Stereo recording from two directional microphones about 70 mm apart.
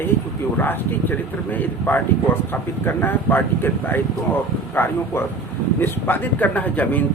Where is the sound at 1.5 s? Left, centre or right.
Left.